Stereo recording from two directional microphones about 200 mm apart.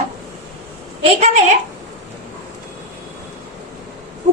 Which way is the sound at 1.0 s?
35° right (ahead or behind).